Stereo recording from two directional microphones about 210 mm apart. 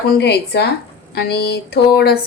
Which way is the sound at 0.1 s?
50° left (ahead or behind).